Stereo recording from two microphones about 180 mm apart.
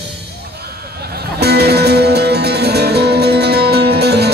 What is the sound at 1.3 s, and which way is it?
Music, 65° right (ahead or behind).